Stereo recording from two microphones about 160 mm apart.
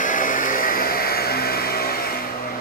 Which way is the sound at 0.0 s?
55° left (ahead or behind).